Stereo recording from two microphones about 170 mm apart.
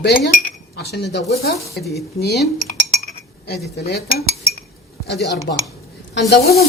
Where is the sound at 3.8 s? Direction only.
70° left (ahead or behind).